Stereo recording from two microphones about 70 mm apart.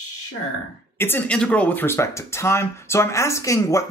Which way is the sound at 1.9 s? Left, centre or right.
Left.